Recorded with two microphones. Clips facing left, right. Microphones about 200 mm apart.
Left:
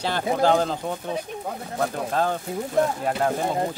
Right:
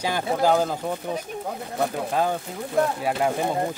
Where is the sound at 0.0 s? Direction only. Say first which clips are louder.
Left 1 dB; 10° right (ahead or behind).